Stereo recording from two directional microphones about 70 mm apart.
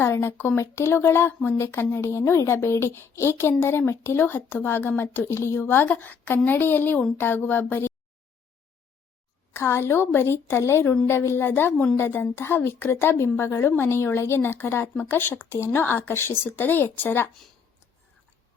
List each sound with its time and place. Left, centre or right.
0.0 s speech: left
9.6 s a woman's voice: left